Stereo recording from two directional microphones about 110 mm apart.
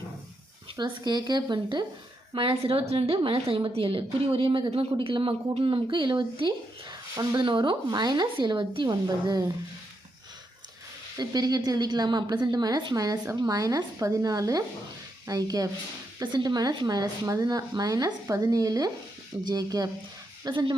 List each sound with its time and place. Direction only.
0.8 s a woman's voice: 40° right (ahead or behind)
2.3 s a woman's voice: 55° right (ahead or behind); by 9.5 s 40° right (ahead or behind)
11.2 s a woman's voice: 35° right (ahead or behind)